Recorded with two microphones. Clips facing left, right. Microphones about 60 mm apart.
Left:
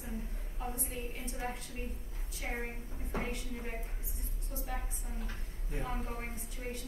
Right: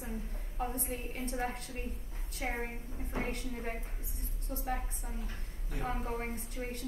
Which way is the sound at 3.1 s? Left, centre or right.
Right.